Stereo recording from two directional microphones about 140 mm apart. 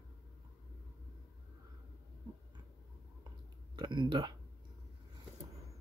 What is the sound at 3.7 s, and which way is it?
Speech, 35° right (ahead or behind).